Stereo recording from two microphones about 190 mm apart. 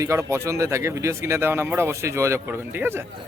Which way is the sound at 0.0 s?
15° right (ahead or behind).